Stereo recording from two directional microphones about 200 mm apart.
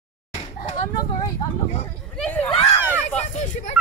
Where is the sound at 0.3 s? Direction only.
30° left (ahead or behind).